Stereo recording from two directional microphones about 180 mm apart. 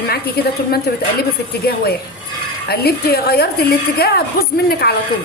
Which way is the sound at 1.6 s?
60° left (ahead or behind).